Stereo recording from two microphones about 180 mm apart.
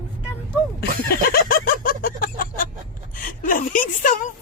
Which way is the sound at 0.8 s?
55° left (ahead or behind).